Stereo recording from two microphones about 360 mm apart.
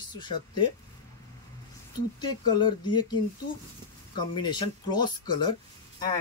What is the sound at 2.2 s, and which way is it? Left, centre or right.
Speech, centre.